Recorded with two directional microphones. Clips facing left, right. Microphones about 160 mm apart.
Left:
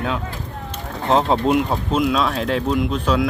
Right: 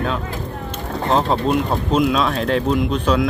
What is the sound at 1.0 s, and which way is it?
Speech, 20° left (ahead or behind).